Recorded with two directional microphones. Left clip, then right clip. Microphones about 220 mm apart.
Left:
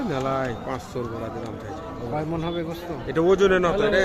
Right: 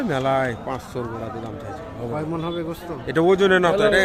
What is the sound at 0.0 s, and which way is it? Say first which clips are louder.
Speech: right 4 dB; 35° right (ahead or behind).